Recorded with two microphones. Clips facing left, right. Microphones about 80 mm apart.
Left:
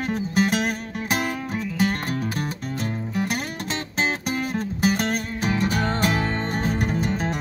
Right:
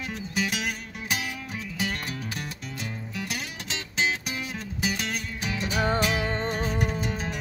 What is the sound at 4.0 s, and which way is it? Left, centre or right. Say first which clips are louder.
Music: left 3 dB; left.